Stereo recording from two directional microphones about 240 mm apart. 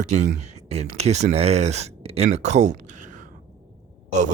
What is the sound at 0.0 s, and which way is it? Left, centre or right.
Speech, right.